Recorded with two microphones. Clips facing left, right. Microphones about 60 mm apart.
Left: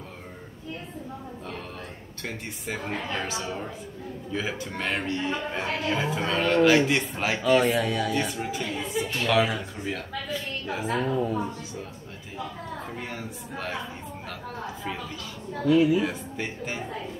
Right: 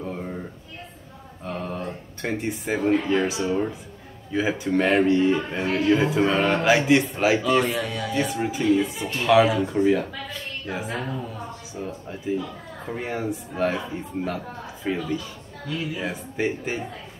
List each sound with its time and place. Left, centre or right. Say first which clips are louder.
2.2 s a man's voice: right 8 dB; right
5.5 s speech: right 7 dB; centre
6.2 s speech: right 1 dB; centre
8.1 s speech: right 3 dB; centre
8.4 s a man's voice: right 9 dB; right
9.2 s speech: right 7 dB; centre
10.7 s a man's voice: left 1 dB; right
11.0 s a woman's voice: left 5 dB; centre
12.9 s a man's voice: right 8 dB; right
14.9 s speech: right 13 dB; centre
15.7 s a woman's voice: left 10 dB; centre
16.0 s a man's voice: right 2 dB; centre